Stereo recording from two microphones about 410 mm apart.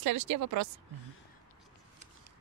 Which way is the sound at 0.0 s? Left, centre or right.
Right.